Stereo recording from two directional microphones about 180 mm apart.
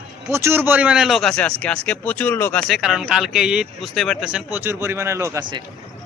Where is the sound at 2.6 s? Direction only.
Centre (ahead or behind); by 5.6 s 25° right (ahead or behind).